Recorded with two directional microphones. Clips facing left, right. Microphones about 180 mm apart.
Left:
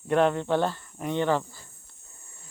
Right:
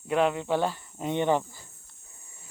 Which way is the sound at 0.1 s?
5° right (ahead or behind).